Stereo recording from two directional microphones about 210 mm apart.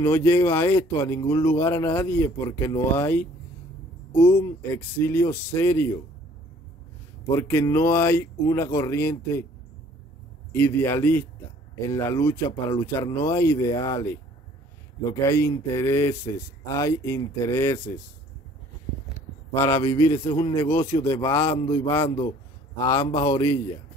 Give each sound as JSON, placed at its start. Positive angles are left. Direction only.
{"t": 0.0, "sound": "speech", "side_deg": 15}
{"t": 7.2, "sound": "speech", "side_deg": 10}
{"t": 10.5, "sound": "speech", "side_deg": 10}
{"t": 15.2, "sound": "speech", "side_deg": 15}
{"t": 19.5, "sound": "a man's voice", "side_deg": 10}
{"t": 20.8, "sound": "speech", "side_deg": 10}
{"t": 22.8, "sound": "a man's voice", "side_deg": 20}